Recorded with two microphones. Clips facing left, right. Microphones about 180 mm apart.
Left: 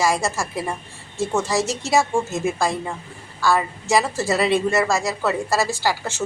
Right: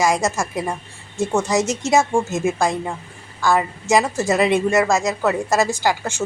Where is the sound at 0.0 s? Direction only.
20° right (ahead or behind).